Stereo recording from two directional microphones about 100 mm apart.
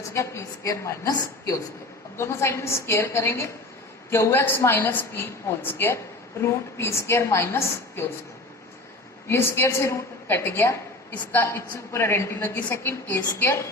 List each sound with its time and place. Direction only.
0.1 s a woman's voice: 30° left (ahead or behind)
9.3 s a woman's voice: 25° left (ahead or behind)